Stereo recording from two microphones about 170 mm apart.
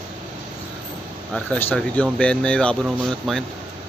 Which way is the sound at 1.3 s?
5° left (ahead or behind).